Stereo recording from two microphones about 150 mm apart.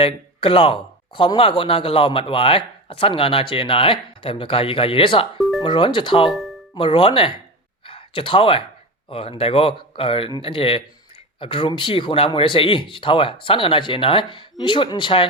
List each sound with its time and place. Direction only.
0.0 s speech: 35° left (ahead or behind)
5.4 s music: centre (ahead or behind)
5.6 s speech: 30° left (ahead or behind)
6.3 s music: centre (ahead or behind)
6.7 s speech: 35° left (ahead or behind)
7.9 s a sound: 35° left (ahead or behind)
9.0 s speech: 40° left (ahead or behind)